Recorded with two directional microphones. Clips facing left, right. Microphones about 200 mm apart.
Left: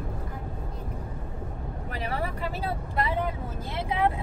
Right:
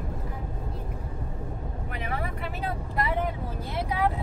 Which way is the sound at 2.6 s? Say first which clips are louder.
Right 1 dB; 25° left (ahead or behind).